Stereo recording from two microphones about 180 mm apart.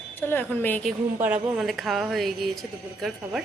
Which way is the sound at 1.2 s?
5° right (ahead or behind).